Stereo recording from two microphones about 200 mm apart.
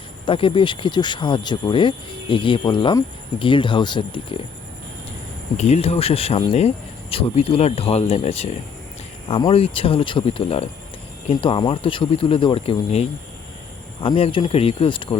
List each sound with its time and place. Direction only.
0.3 s speech: 25° left (ahead or behind)
5.5 s speech: 35° left (ahead or behind)